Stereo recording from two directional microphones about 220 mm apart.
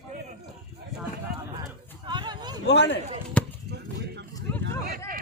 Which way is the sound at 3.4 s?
5° left (ahead or behind).